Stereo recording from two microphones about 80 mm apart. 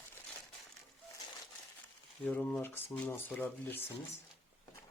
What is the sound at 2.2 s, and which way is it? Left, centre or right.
Speech, left.